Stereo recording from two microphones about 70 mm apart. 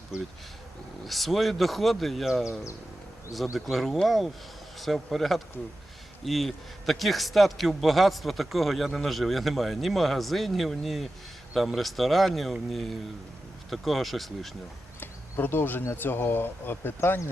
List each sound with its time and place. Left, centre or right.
0.1 s a man's voice: centre
15.0 s speech: left